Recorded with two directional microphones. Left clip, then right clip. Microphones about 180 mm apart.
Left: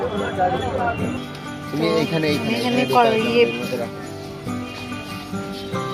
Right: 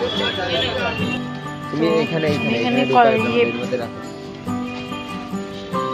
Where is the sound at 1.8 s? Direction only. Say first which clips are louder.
Right 2 dB; 35° right (ahead or behind).